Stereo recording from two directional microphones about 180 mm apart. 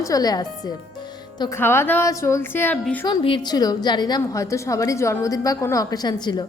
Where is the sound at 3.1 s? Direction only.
25° left (ahead or behind).